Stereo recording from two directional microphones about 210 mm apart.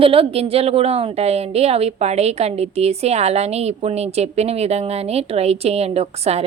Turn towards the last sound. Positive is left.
turn(degrees=-30)  # may be behind; listen again after turning